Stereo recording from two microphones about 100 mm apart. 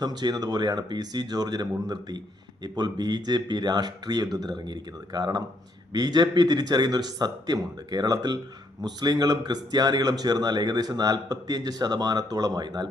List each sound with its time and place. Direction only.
0.0 s speech: 45° right (ahead or behind)